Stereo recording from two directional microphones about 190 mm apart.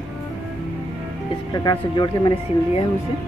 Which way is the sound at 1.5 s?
20° left (ahead or behind).